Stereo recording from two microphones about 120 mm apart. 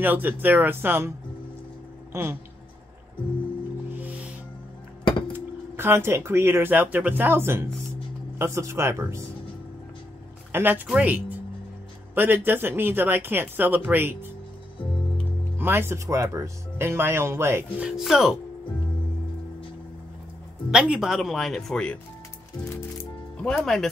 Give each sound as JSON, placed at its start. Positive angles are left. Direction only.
{"t": 0.0, "sound": "speech", "side_deg": -15}
{"t": 2.1, "sound": "speech", "side_deg": -25}
{"t": 5.8, "sound": "speech", "side_deg": -20}
{"t": 10.5, "sound": "speech", "side_deg": -15}
{"t": 15.5, "sound": "speech", "side_deg": -15}
{"t": 17.7, "sound": "speech", "side_deg": -5}
{"t": 20.7, "sound": "speech", "side_deg": -5}
{"t": 23.3, "sound": "speech", "side_deg": 5}